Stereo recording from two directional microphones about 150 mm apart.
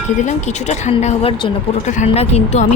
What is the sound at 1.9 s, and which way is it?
Speech, 50° left (ahead or behind).